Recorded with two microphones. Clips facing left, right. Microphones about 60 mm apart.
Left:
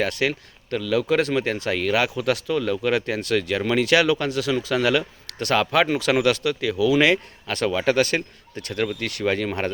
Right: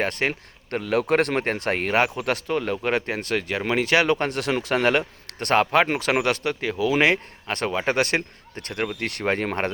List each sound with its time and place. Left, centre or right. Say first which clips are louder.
0.0 s speech: left 1 dB; right
7.9 s speech: left 2 dB; right
9.0 s speech: left 1 dB; right